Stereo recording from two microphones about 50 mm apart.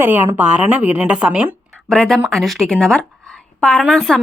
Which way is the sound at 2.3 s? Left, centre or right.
Centre.